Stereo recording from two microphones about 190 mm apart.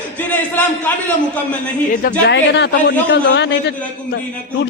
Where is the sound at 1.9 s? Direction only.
45° left (ahead or behind).